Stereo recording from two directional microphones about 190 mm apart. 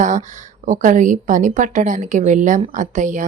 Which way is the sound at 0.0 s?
40° right (ahead or behind).